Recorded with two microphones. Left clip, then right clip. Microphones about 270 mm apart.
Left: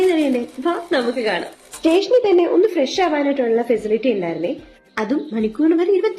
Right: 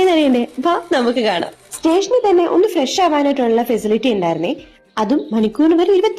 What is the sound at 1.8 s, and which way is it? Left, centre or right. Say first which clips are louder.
A woman's voice: right 1 dB; right.